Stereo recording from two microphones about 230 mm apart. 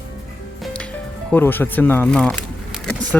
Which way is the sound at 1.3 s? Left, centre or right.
Centre.